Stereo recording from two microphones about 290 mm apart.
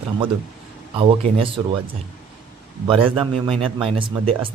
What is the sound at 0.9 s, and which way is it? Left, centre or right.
Speech, centre.